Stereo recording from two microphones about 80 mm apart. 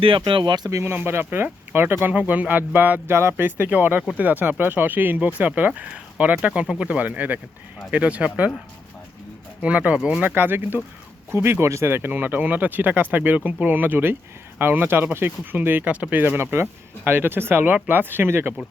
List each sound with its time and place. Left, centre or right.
0.3 s speech: right
0.7 s speech: right; by 8.5 s centre
9.6 s speech: centre